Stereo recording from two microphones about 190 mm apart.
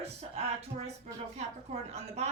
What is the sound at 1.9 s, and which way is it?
Speech, 35° right (ahead or behind).